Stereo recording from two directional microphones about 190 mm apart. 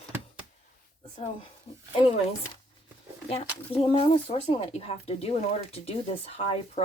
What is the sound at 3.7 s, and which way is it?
Speech, 30° left (ahead or behind).